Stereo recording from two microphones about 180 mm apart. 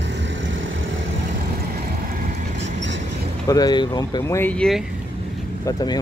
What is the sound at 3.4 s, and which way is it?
Speech, 20° left (ahead or behind).